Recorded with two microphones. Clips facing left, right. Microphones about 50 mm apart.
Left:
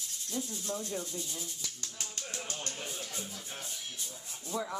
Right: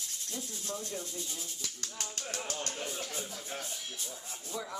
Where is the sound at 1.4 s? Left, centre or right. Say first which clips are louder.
Even; right.